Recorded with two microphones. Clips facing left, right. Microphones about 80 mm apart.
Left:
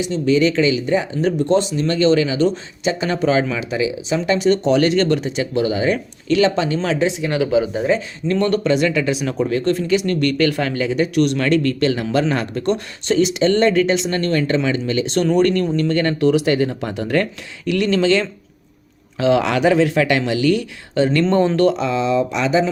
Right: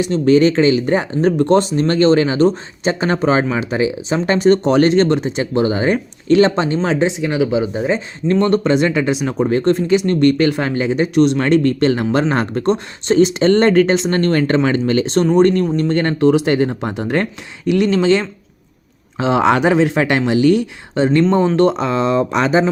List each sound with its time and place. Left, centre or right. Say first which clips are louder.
0.0 s speech: right 4 dB; right
7.3 s speech: right 1 dB; centre
21.2 s speech: right 1 dB; centre
21.5 s speech: right 2 dB; right